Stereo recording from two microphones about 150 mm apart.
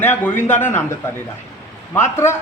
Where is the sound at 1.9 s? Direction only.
15° left (ahead or behind).